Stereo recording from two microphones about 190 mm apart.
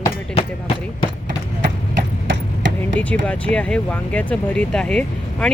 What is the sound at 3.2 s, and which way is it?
Speech, 5° left (ahead or behind).